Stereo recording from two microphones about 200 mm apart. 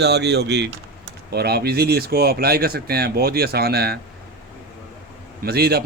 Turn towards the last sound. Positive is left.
turn(degrees=-50)  # may be behind; listen again after turning